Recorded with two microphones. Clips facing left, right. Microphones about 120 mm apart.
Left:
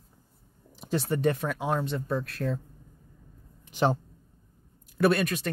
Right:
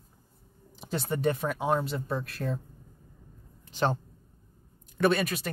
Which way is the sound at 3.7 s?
10° left (ahead or behind).